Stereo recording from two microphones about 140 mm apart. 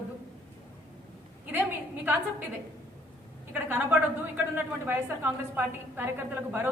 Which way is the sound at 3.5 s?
15° right (ahead or behind).